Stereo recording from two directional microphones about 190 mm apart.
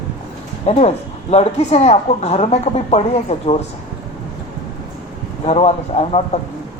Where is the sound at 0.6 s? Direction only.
35° left (ahead or behind).